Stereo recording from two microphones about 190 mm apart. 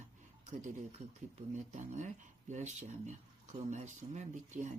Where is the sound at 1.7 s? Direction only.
40° right (ahead or behind).